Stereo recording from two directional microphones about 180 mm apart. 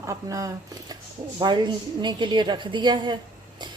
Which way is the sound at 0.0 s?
20° right (ahead or behind).